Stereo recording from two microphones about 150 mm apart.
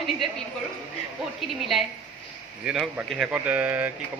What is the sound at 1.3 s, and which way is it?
A woman's voice, centre (ahead or behind).